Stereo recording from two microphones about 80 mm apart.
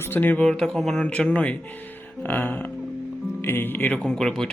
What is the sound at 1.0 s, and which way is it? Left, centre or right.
Speech, centre.